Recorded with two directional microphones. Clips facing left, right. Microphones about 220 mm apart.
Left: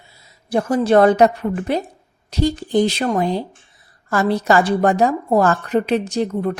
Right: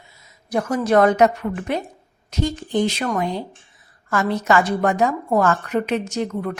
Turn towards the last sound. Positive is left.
turn(degrees=35)  # may be behind; listen again after turning